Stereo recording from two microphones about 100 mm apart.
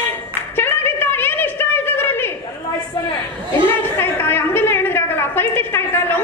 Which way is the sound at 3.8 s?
20° left (ahead or behind).